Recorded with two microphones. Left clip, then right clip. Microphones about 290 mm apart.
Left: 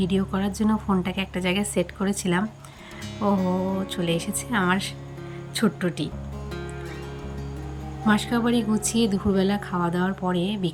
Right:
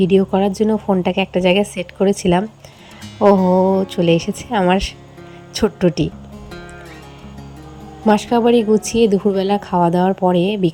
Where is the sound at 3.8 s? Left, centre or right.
Centre.